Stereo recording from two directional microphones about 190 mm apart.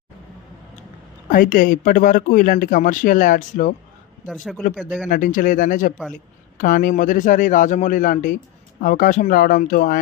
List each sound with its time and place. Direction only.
1.3 s speech: 50° left (ahead or behind)
4.3 s a man's voice: centre (ahead or behind)
5.0 s speech: 45° left (ahead or behind)